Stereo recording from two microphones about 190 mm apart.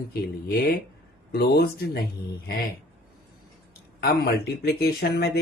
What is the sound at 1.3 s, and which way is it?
Speech, 55° left (ahead or behind).